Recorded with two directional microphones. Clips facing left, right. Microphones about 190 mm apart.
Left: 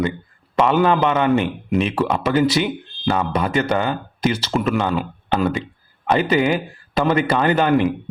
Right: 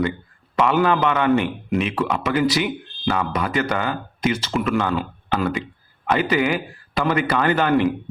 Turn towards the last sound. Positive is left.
turn(degrees=20)  # may be behind; listen again after turning